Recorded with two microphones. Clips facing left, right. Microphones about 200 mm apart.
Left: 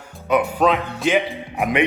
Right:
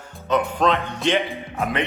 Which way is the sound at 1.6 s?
15° left (ahead or behind).